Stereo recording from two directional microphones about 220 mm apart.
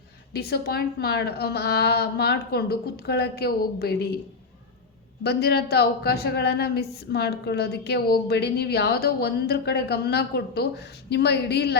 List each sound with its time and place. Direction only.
0.3 s a woman's voice: 45° left (ahead or behind)
5.2 s a woman's voice: 50° left (ahead or behind)